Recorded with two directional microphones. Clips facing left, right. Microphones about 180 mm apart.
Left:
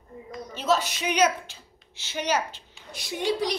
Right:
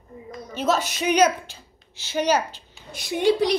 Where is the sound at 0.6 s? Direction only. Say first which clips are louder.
Right 2 dB; 50° right (ahead or behind).